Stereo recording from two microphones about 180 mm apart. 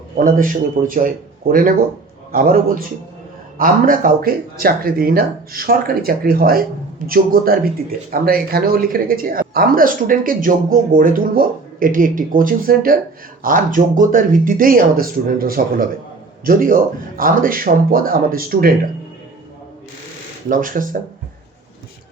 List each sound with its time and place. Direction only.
0.2 s speech: 50° right (ahead or behind)
20.5 s speech: 50° right (ahead or behind)